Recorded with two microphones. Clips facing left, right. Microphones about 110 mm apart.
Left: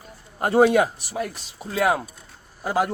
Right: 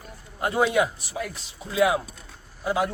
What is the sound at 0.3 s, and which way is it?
Speech, 50° left (ahead or behind).